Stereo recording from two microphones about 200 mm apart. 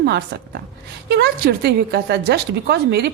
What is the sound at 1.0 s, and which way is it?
A woman's voice, 55° right (ahead or behind).